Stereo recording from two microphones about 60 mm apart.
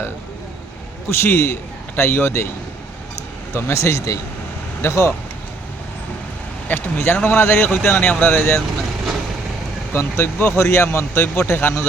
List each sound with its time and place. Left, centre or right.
1.1 s speech: left
3.5 s speech: left
4.8 s speech: left
6.7 s speech: left
9.9 s speech: left